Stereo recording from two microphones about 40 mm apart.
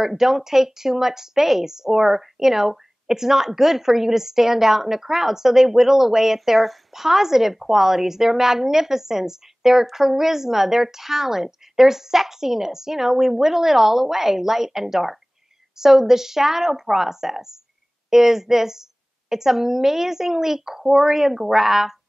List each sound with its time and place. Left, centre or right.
0.0 s a woman's voice: centre